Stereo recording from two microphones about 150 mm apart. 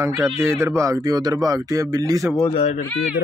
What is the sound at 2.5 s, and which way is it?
Speech, 40° left (ahead or behind).